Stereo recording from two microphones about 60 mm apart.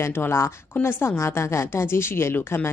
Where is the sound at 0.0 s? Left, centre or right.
Left.